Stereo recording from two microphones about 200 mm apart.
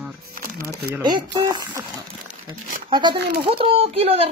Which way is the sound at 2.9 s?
25° right (ahead or behind).